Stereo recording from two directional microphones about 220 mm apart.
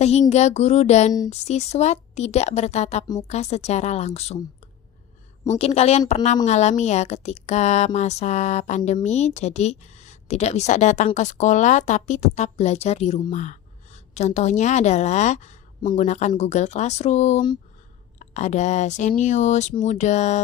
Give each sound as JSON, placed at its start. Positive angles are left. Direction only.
{"t": 0.3, "sound": "speech", "side_deg": 30}
{"t": 5.5, "sound": "speech", "side_deg": 30}